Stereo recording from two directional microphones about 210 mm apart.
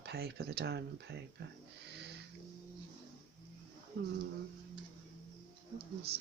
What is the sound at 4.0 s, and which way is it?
Speech, 60° right (ahead or behind).